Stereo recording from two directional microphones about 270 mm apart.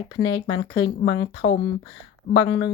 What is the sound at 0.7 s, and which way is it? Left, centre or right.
Speech, centre.